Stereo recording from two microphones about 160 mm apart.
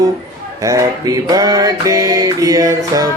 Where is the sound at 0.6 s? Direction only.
20° right (ahead or behind).